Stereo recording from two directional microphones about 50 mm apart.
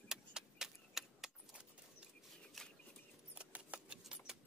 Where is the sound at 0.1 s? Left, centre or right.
Centre.